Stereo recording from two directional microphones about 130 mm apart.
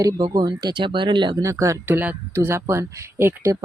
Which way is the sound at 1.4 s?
25° right (ahead or behind).